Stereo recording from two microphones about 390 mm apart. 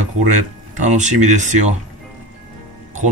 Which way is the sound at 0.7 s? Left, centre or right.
Centre.